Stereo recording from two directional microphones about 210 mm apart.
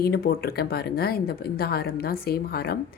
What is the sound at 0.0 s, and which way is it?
A woman's voice, 45° left (ahead or behind).